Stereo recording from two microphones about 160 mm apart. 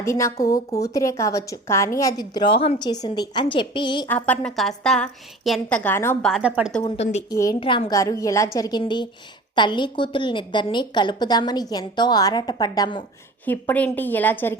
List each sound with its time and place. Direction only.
0.0 s a woman's voice: 20° left (ahead or behind)
4.1 s a woman's voice: 5° left (ahead or behind)
6.3 s a woman's voice: 5° right (ahead or behind)
6.9 s a woman's voice: 40° left (ahead or behind)
7.3 s a woman's voice: 20° left (ahead or behind)
7.6 s a woman's voice: 35° left (ahead or behind)
13.4 s a woman's voice: 10° left (ahead or behind)